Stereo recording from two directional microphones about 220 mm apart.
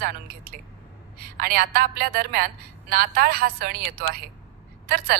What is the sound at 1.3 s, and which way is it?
A woman's voice, 45° right (ahead or behind).